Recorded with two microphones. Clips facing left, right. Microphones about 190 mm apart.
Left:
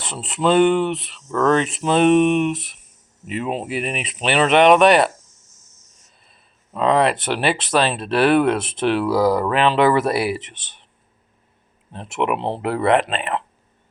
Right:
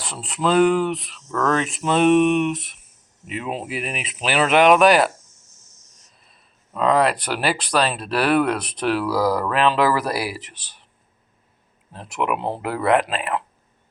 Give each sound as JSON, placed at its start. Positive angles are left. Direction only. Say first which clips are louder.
{"t": 0.0, "sound": "speech", "louder": "left 3 dB", "side_deg": 0}
{"t": 6.7, "sound": "speech", "louder": "left 1 dB", "side_deg": 0}
{"t": 8.5, "sound": "speech", "louder": "left 4 dB", "side_deg": 25}
{"t": 8.8, "sound": "speech", "louder": "left 3 dB", "side_deg": 0}
{"t": 12.2, "sound": "speech", "louder": "left 2 dB", "side_deg": 0}